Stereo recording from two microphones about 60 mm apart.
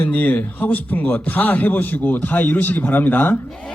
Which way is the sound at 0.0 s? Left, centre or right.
Left.